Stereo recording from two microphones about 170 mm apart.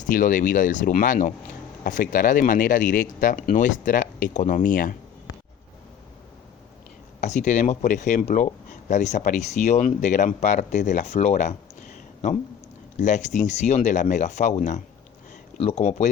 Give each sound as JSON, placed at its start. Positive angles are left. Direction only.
{"t": 0.0, "sound": "speech", "side_deg": 50}
{"t": 7.2, "sound": "speech", "side_deg": 45}